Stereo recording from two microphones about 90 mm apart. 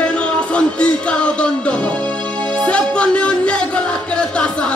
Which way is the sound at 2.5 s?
10° left (ahead or behind).